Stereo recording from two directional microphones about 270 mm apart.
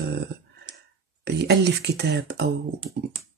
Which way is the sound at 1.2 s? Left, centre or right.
Right.